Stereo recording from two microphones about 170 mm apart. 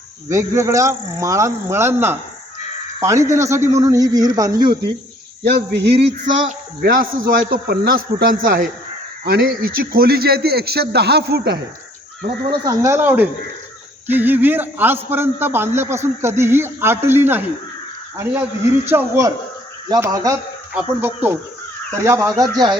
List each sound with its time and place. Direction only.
0.3 s a man's voice: 15° right (ahead or behind)
5.5 s speech: 90° right
5.9 s a sound: 35° right (ahead or behind)
6.8 s speech: 55° right (ahead or behind); by 11.5 s 70° right (ahead or behind)
12.5 s a man's voice: 20° right (ahead or behind)
18.9 s a man's voice: 15° right (ahead or behind)